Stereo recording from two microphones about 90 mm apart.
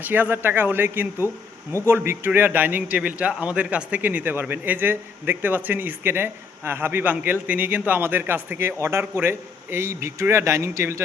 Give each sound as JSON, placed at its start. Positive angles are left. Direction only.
{"t": 0.0, "sound": "a man's voice", "side_deg": -20}